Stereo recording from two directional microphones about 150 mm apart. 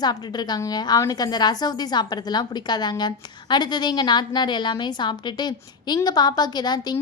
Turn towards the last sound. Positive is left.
turn(degrees=30)  # may be behind; listen again after turning